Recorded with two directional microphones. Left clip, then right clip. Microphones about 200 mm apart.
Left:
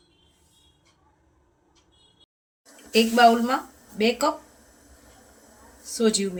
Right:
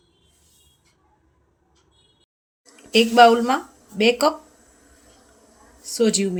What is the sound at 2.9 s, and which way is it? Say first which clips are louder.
Speech: right 4 dB; 45° right (ahead or behind).